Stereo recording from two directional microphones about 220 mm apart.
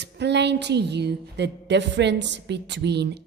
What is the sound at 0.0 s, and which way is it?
A woman's voice, 50° right (ahead or behind).